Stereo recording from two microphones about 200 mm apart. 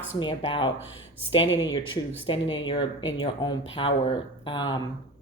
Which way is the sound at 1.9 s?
25° left (ahead or behind).